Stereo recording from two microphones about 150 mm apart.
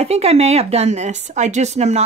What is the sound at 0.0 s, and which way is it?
A woman's voice, 45° right (ahead or behind).